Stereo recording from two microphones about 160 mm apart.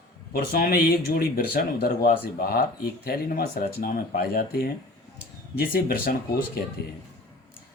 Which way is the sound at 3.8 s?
75° left (ahead or behind).